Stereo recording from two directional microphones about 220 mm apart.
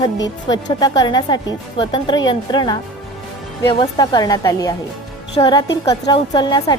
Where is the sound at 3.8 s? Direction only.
20° left (ahead or behind).